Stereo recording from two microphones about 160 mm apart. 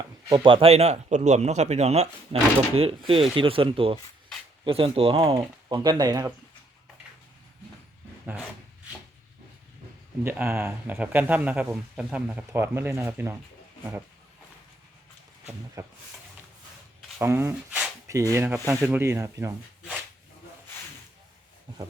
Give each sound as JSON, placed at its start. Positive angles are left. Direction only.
{"t": 0.0, "sound": "speech", "side_deg": -25}
{"t": 10.2, "sound": "speech", "side_deg": -15}
{"t": 15.8, "sound": "speech", "side_deg": -20}
{"t": 17.2, "sound": "speech", "side_deg": -15}